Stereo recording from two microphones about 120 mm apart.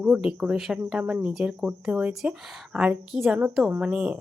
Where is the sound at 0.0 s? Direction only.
10° right (ahead or behind).